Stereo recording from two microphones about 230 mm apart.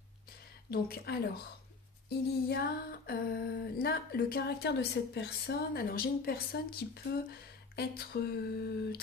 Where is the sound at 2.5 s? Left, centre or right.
Left.